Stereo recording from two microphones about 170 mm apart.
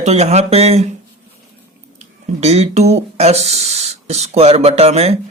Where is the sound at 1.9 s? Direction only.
40° right (ahead or behind).